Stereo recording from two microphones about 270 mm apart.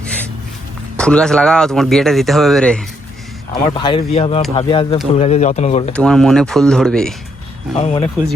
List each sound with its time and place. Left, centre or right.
0.9 s speech: centre
3.5 s speech: centre
5.9 s speech: centre
7.8 s speech: left